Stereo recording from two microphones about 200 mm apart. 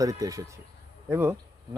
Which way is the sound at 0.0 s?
15° right (ahead or behind).